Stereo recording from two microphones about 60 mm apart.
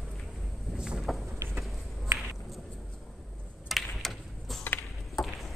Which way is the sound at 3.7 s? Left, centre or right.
Centre.